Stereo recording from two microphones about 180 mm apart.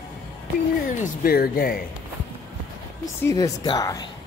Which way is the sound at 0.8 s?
55° left (ahead or behind).